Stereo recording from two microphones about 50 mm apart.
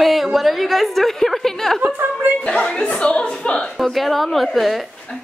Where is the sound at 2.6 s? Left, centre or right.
Centre.